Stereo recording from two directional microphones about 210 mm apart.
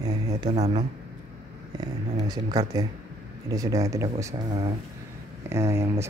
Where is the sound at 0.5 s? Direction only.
30° right (ahead or behind).